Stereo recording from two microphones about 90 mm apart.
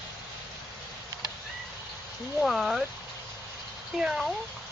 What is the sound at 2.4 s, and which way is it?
Speech, centre (ahead or behind).